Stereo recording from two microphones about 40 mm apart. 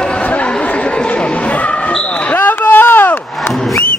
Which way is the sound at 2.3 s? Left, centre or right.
Left.